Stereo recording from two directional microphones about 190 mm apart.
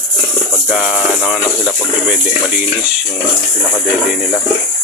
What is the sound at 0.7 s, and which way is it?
Speech, 5° right (ahead or behind).